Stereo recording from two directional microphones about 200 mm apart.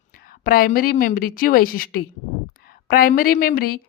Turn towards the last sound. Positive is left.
turn(degrees=45)  # may be behind; listen again after turning